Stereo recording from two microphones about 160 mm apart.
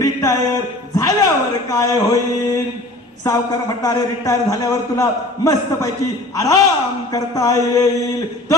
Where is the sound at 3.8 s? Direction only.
25° left (ahead or behind).